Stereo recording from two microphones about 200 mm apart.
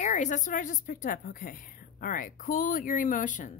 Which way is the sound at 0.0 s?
35° left (ahead or behind).